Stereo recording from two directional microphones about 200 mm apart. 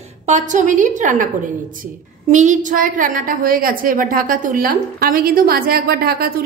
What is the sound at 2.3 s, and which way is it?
A woman's voice, 35° right (ahead or behind).